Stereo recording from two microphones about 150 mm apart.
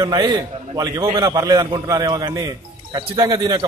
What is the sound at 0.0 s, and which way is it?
A man's voice, 30° right (ahead or behind).